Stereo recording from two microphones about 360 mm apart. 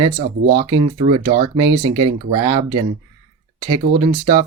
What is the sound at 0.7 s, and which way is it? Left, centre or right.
Speech, centre.